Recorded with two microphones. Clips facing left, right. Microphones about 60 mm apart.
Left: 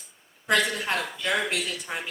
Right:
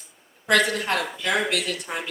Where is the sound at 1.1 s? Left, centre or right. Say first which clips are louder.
Right 3 dB; right.